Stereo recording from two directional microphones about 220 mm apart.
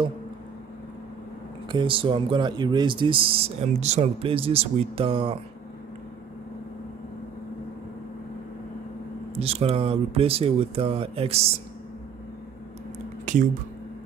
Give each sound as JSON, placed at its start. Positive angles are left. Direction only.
{"t": 1.7, "sound": "speech", "side_deg": -20}
{"t": 9.3, "sound": "speech", "side_deg": -25}
{"t": 13.2, "sound": "a sound", "side_deg": -35}